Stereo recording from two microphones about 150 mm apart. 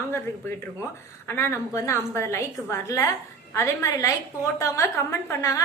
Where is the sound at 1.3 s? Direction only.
15° left (ahead or behind).